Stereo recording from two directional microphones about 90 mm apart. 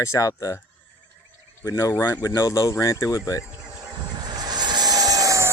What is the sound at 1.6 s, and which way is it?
Speech, 35° left (ahead or behind).